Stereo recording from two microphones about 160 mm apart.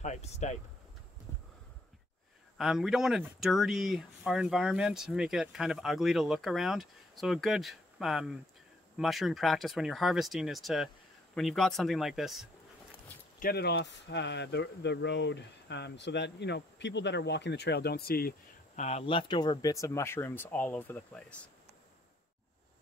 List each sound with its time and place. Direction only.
0.0 s speech: 45° left (ahead or behind)
2.5 s speech: 5° right (ahead or behind)
13.4 s speech: 75° left (ahead or behind)
18.8 s speech: 40° left (ahead or behind); by 21.4 s 5° left (ahead or behind)